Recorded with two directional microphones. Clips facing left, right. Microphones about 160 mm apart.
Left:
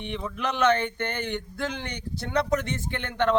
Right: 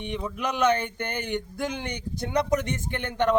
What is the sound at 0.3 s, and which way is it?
Speech, 15° right (ahead or behind).